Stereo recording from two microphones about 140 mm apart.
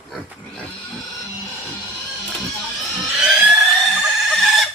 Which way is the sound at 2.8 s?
5° right (ahead or behind).